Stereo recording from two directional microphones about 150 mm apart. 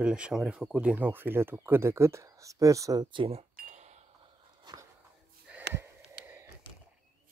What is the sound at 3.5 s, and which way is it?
Cash register, 70° right (ahead or behind).